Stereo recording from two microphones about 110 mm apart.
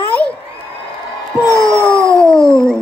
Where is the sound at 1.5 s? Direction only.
30° right (ahead or behind).